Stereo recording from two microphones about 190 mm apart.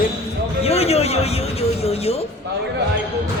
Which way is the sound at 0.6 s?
30° left (ahead or behind).